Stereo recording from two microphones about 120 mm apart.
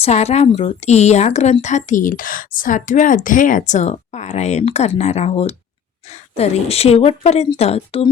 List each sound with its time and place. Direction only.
0.0 s speech: 60° left (ahead or behind)
1.6 s speech: 90° left; by 8.0 s 55° left (ahead or behind)